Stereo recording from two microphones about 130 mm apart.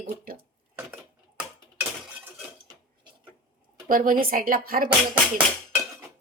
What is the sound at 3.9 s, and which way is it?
A woman's voice, 90° right.